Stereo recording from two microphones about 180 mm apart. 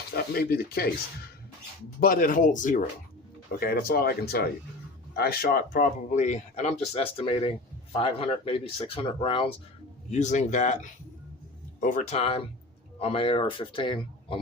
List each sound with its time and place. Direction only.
0.1 s speech: 60° left (ahead or behind)
2.0 s speech: 50° left (ahead or behind)
3.6 s speech: 55° left (ahead or behind); by 9.5 s 30° left (ahead or behind)
10.1 s speech: 40° left (ahead or behind)